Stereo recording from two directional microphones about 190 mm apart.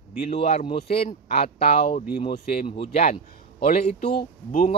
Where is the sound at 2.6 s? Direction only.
30° left (ahead or behind).